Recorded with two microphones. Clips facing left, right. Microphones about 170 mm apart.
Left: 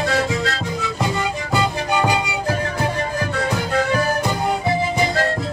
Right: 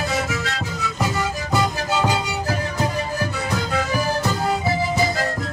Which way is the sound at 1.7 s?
15° left (ahead or behind).